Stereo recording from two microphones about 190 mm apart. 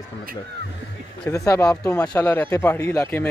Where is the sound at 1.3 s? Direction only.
15° left (ahead or behind).